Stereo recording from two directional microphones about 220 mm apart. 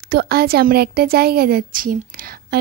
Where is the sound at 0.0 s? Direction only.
45° right (ahead or behind).